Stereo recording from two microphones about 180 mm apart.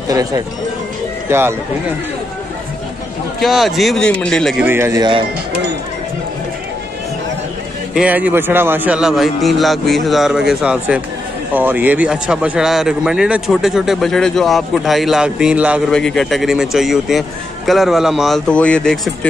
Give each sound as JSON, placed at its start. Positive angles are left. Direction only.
{"t": 0.1, "sound": "speech", "side_deg": -20}
{"t": 3.3, "sound": "speech", "side_deg": 0}
{"t": 4.6, "sound": "speech", "side_deg": -15}
{"t": 7.9, "sound": "speech", "side_deg": -5}
{"t": 15.9, "sound": "speech", "side_deg": 5}